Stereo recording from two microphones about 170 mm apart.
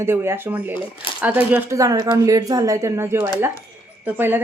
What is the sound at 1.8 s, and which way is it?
A woman's voice, 20° right (ahead or behind).